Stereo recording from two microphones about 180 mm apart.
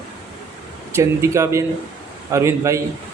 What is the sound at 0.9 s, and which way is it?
A man's voice, 15° right (ahead or behind).